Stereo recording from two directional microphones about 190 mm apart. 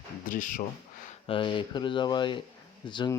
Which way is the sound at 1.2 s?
25° left (ahead or behind).